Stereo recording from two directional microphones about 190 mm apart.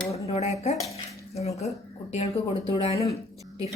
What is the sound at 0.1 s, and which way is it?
Speech, 35° left (ahead or behind).